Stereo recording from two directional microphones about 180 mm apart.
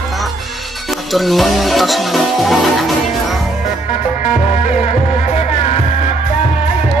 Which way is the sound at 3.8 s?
40° left (ahead or behind).